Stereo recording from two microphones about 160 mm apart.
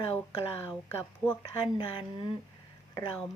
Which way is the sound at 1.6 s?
25° left (ahead or behind).